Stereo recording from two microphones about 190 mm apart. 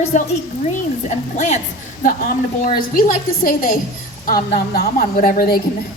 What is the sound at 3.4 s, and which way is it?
A woman's voice, 45° left (ahead or behind).